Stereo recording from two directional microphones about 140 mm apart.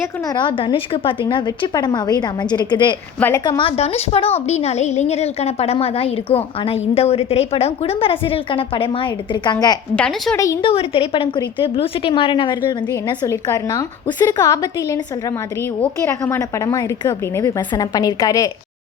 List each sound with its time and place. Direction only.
0.3 s a woman's voice: 35° left (ahead or behind)
3.2 s a woman's voice: 15° left (ahead or behind)
3.4 s a woman's voice: 35° left (ahead or behind)
9.9 s a woman's voice: 5° left (ahead or behind)
10.3 s a woman's voice: 25° left (ahead or behind)
10.6 s a woman's voice: 40° left (ahead or behind)
13.1 s a woman's voice: 20° left (ahead or behind)
15.8 s a woman's voice: 15° left (ahead or behind)